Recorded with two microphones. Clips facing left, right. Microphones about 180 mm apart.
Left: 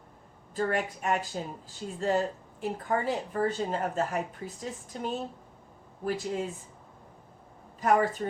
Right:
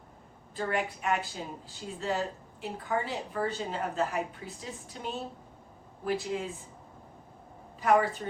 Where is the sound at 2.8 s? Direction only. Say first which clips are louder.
Left 2 dB; 45° left (ahead or behind).